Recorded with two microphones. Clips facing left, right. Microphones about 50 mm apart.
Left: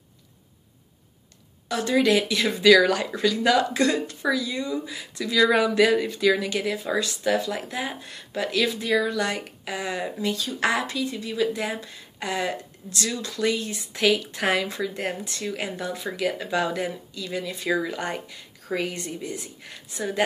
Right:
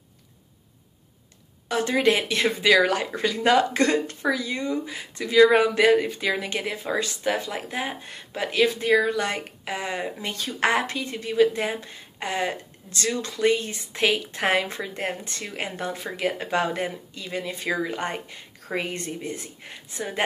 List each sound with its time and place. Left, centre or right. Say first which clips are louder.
1.7 s speech: even; right
2.6 s speech: left 4 dB; right